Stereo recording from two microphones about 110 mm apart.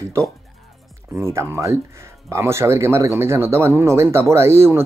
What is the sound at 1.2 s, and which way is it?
Speech, 25° right (ahead or behind).